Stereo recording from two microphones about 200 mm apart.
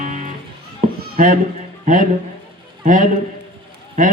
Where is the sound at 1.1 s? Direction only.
40° right (ahead or behind).